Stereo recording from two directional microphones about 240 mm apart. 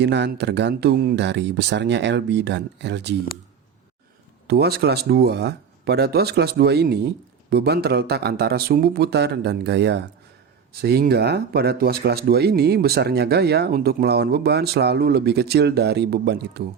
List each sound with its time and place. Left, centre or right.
0.0 s speech: right
4.4 s speech: right